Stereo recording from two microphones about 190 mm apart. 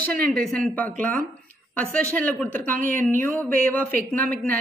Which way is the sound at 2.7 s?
45° right (ahead or behind).